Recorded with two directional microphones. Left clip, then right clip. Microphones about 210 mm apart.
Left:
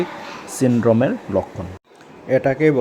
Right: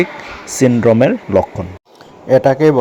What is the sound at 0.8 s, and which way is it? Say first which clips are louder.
Speech: right 5 dB; 20° right (ahead or behind).